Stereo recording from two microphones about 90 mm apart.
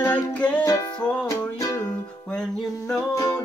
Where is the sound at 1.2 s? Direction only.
35° left (ahead or behind).